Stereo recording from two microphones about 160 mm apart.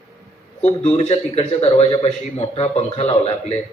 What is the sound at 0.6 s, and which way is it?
A man's voice, 40° left (ahead or behind).